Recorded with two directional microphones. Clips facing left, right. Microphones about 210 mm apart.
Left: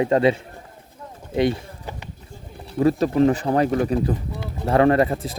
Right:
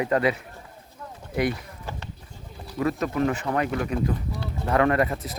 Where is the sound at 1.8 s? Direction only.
15° left (ahead or behind).